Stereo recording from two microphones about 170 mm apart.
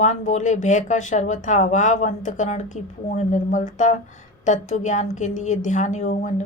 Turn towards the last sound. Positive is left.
turn(degrees=45)  # may be behind; listen again after turning